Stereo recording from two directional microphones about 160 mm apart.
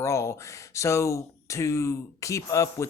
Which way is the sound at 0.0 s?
20° left (ahead or behind).